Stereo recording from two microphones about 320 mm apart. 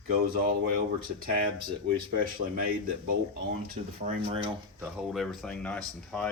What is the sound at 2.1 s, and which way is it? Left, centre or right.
Speech, right.